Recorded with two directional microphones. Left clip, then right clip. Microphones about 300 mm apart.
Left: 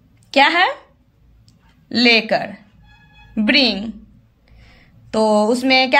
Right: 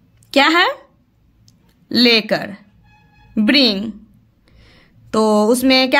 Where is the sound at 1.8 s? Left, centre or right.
Centre.